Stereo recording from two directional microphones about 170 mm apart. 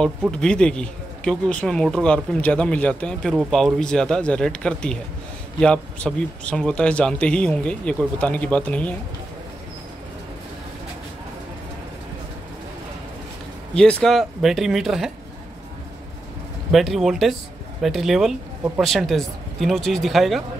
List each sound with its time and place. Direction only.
0.3 s speech: 5° left (ahead or behind)
13.7 s speech: 5° left (ahead or behind)
16.7 s speech: centre (ahead or behind)